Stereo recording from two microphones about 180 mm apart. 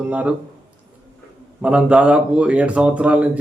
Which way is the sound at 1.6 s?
5° right (ahead or behind).